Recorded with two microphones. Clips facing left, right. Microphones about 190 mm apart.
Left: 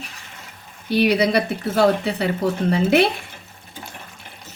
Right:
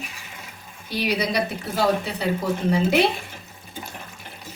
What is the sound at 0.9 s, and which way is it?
A woman's voice, 60° left (ahead or behind).